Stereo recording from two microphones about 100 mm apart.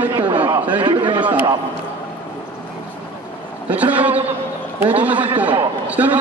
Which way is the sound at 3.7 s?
15° right (ahead or behind).